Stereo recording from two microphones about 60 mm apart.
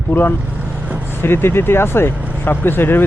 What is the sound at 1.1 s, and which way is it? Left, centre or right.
Speech, left.